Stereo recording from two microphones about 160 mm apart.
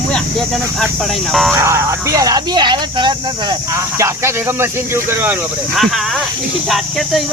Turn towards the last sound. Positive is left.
turn(degrees=0)  # may be behind; listen again after turning